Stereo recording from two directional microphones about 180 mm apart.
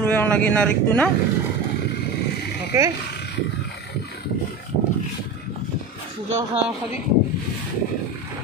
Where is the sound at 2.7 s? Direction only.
15° right (ahead or behind).